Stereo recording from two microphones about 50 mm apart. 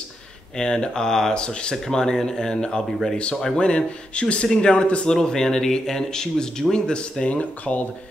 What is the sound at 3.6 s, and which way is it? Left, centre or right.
A man's voice, centre.